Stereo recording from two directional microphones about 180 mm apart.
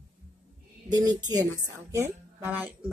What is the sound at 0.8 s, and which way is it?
A woman's voice, 20° right (ahead or behind).